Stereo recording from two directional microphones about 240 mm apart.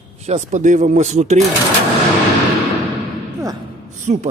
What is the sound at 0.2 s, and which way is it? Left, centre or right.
Speech, right.